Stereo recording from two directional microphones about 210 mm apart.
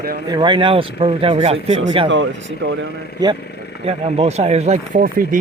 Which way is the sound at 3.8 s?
30° right (ahead or behind).